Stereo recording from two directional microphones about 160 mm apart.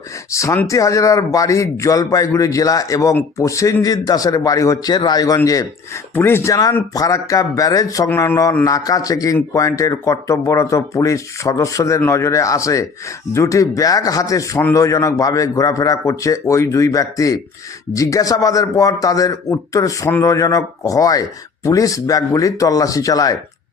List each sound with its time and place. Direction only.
0.3 s speech: 20° left (ahead or behind)